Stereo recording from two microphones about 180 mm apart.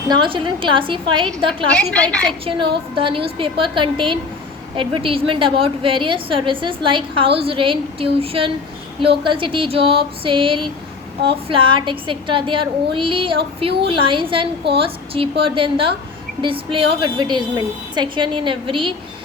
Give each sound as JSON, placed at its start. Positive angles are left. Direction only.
{"t": 0.1, "sound": "a woman's voice", "side_deg": -25}
{"t": 1.7, "sound": "a woman's voice", "side_deg": 5}
{"t": 2.4, "sound": "a woman's voice", "side_deg": -30}